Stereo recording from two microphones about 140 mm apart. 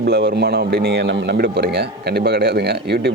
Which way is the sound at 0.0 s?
90° right.